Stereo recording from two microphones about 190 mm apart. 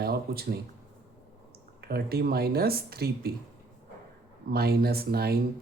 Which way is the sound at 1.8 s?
55° right (ahead or behind).